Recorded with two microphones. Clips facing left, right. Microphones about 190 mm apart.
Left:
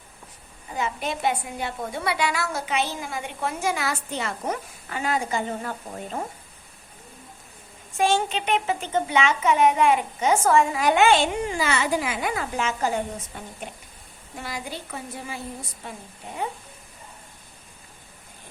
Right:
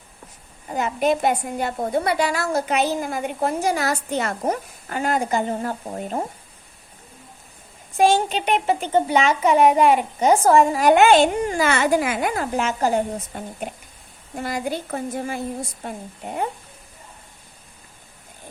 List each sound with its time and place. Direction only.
0.7 s a woman's voice: 50° right (ahead or behind)
7.9 s a child's voice: 35° right (ahead or behind)